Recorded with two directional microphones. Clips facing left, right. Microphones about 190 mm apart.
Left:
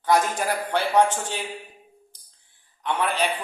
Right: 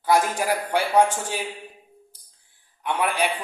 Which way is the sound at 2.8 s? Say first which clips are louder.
Right 1 dB; 10° right (ahead or behind).